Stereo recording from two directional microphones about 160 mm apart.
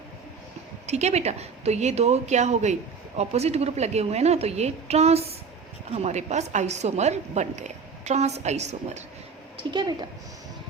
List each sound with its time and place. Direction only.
0.9 s a woman's voice: 45° right (ahead or behind)
9.7 s a woman's voice: 25° right (ahead or behind)